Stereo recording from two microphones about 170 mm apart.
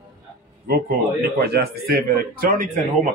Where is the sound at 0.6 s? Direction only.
65° right (ahead or behind).